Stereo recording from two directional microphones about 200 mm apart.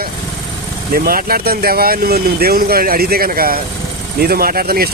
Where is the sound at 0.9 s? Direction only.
45° right (ahead or behind).